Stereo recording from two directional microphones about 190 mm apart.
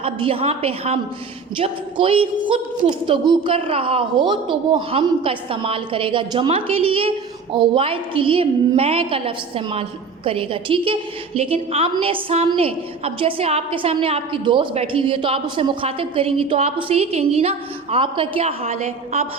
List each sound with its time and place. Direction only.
0.0 s a woman's voice: 30° right (ahead or behind)